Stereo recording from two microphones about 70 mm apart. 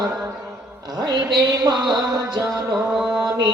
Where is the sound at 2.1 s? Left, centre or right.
Right.